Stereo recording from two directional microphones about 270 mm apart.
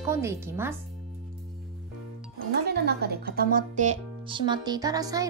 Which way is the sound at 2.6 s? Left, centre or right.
Right.